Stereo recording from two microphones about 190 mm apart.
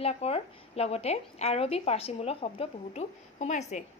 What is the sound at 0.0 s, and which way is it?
A woman's voice, 30° left (ahead or behind).